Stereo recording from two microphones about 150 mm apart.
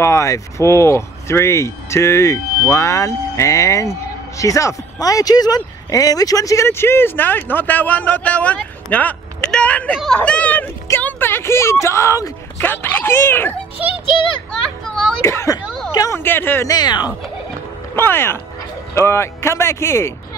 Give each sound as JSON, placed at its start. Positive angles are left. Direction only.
{"t": 0.0, "sound": "speech", "side_deg": 20}
{"t": 14.5, "sound": "children playing", "side_deg": 5}
{"t": 15.2, "sound": "speech", "side_deg": 20}
{"t": 16.7, "sound": "speech", "side_deg": 25}
{"t": 17.9, "sound": "speech", "side_deg": 15}